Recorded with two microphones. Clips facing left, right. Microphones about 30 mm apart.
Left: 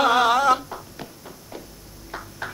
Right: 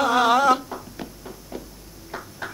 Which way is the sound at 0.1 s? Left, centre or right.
Centre.